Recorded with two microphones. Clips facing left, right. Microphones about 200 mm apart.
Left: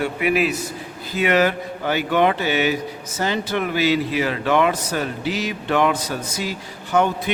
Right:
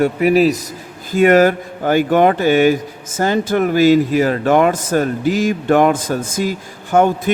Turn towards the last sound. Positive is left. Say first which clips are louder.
# right 5 dB
turn(degrees=-50)  # may be behind; listen again after turning